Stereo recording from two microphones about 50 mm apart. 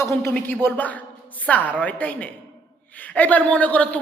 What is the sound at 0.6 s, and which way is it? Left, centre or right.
Speech, left.